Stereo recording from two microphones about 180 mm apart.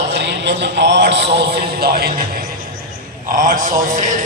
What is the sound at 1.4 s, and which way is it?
Speech, 65° right (ahead or behind).